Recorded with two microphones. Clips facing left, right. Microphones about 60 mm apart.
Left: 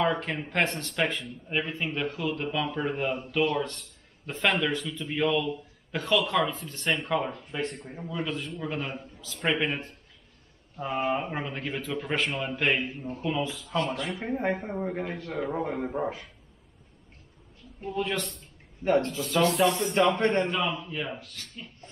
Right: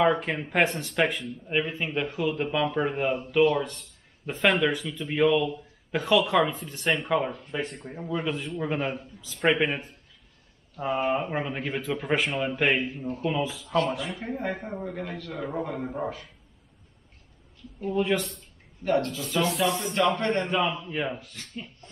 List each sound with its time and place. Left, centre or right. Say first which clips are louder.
0.0 s speech: right 4 dB; centre
14.8 s speech: left 3 dB; left
15.3 s a man's voice: left 1 dB; centre
17.8 s speech: right 5 dB; centre
18.9 s speech: left 1 dB; left
19.2 s speech: left 2 dB; centre
20.2 s speech: left 2 dB; left
20.4 s speech: right 2 dB; centre